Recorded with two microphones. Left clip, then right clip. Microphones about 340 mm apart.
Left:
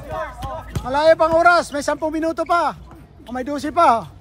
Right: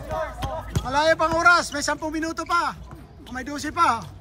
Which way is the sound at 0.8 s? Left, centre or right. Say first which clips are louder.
Left 6 dB; centre.